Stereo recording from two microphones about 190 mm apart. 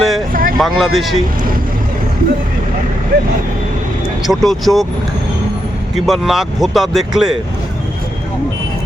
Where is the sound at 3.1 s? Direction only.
55° right (ahead or behind).